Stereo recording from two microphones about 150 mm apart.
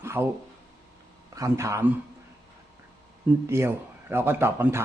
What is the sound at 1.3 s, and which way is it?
Speech, 20° right (ahead or behind).